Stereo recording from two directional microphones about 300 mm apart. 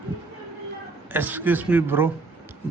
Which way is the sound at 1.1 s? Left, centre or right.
Centre.